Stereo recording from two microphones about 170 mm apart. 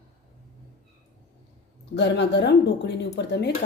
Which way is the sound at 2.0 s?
90° left.